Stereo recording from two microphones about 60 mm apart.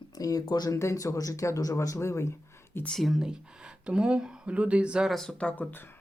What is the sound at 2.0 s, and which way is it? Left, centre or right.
Speech, left.